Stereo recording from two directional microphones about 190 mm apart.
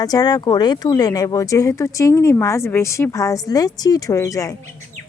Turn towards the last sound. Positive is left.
turn(degrees=15)  # may be behind; listen again after turning